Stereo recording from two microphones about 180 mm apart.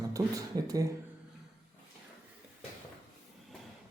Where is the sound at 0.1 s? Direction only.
20° right (ahead or behind).